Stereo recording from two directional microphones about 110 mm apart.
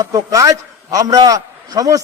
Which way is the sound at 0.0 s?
30° right (ahead or behind).